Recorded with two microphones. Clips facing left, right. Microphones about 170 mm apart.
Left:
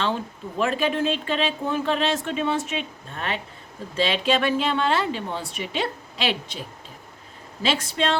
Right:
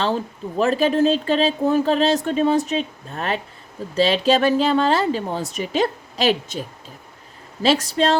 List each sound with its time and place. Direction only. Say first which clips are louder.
0.6 s speech: right 6 dB; 40° right (ahead or behind)